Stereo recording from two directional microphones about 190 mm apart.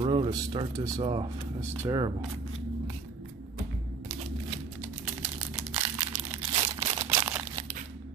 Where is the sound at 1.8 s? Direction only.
20° right (ahead or behind).